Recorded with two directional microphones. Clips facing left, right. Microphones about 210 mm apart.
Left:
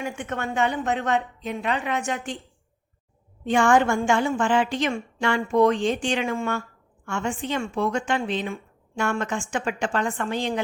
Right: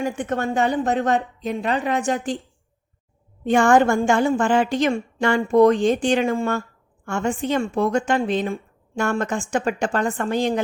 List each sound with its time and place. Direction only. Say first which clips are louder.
0.0 s a woman's voice: right 6 dB; 35° right (ahead or behind)
3.4 s a woman's voice: right 4 dB; 40° right (ahead or behind)